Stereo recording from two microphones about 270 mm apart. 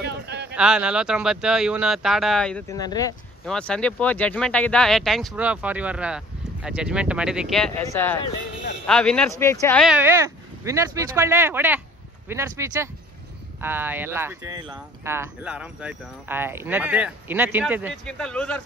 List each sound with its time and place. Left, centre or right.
0.0 s a sound: right
0.6 s speech: centre
3.4 s speech: centre